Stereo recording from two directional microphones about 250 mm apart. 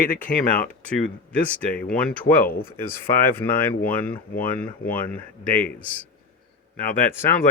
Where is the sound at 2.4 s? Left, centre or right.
Left.